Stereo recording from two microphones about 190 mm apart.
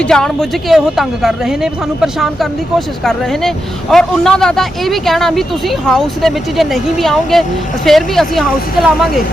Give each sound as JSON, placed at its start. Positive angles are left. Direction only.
{"t": 0.0, "sound": "a woman's voice", "side_deg": 5}